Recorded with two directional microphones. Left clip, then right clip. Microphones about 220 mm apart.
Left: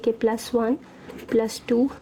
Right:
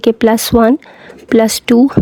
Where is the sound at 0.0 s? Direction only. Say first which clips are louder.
Right 12 dB; 45° right (ahead or behind).